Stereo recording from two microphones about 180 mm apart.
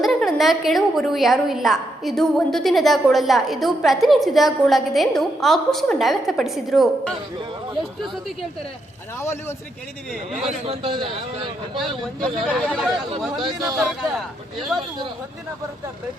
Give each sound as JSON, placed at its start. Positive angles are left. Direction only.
{"t": 0.0, "sound": "a woman's voice", "side_deg": 0}
{"t": 9.2, "sound": "a man's voice", "side_deg": 15}
{"t": 10.4, "sound": "a man's voice", "side_deg": -30}
{"t": 11.8, "sound": "a woman's voice", "side_deg": 0}
{"t": 13.4, "sound": "a man's voice", "side_deg": -25}
{"t": 13.7, "sound": "a woman's voice", "side_deg": 0}